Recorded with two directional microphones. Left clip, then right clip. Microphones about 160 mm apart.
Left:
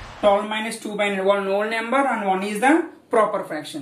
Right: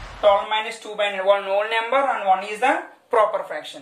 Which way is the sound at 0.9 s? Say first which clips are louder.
Right 1 dB; 25° right (ahead or behind).